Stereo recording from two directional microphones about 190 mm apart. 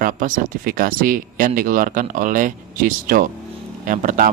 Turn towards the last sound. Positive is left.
turn(degrees=-45)  # may be behind; listen again after turning